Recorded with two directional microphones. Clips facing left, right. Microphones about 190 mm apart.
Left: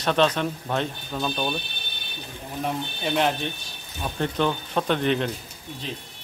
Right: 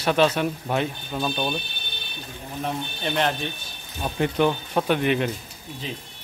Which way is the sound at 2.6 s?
5° left (ahead or behind).